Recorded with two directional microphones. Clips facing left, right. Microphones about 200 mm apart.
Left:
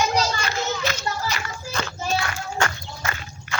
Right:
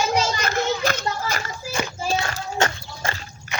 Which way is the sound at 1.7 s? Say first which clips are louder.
Right 3 dB; 10° right (ahead or behind).